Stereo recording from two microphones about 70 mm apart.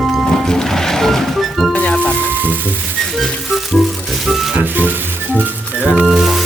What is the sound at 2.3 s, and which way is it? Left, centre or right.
Sizzle, right.